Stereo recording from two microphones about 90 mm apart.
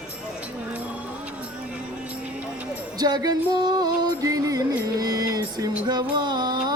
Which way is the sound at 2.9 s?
50° right (ahead or behind).